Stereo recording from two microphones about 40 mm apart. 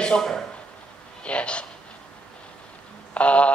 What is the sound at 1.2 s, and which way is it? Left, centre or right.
Speech, left.